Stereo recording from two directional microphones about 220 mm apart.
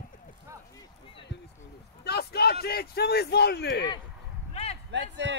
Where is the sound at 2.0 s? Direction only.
45° left (ahead or behind).